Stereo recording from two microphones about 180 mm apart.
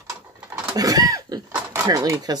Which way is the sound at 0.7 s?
20° right (ahead or behind).